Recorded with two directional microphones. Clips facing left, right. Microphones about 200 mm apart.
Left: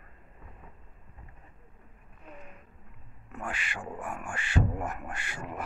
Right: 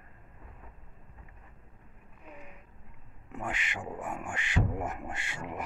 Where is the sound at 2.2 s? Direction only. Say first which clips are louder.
Left 1 dB; 10° right (ahead or behind).